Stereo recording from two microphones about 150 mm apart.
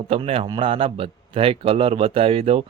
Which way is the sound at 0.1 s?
40° right (ahead or behind).